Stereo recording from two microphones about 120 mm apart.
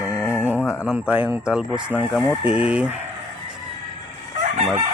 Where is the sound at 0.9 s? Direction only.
15° right (ahead or behind).